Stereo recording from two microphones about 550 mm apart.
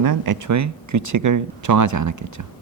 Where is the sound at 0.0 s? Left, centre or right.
Right.